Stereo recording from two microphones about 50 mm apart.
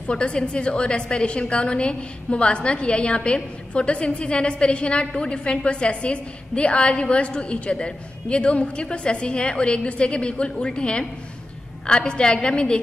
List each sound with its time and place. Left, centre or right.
0.1 s a woman's voice: centre